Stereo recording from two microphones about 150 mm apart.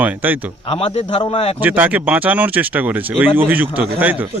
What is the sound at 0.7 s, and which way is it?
Speech, 40° left (ahead or behind).